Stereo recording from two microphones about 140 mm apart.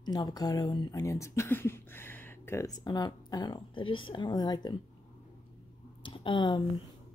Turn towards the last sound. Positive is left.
turn(degrees=35)  # may be behind; listen again after turning